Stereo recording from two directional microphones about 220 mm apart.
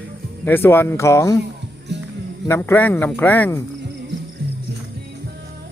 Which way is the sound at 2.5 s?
10° left (ahead or behind).